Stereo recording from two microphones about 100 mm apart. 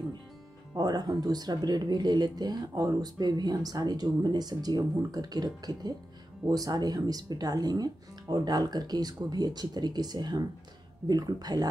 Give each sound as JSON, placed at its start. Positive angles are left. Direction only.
{"t": 0.7, "sound": "speech", "side_deg": -40}